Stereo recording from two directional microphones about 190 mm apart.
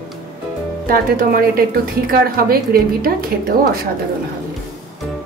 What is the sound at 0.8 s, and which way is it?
A woman's voice, 50° right (ahead or behind).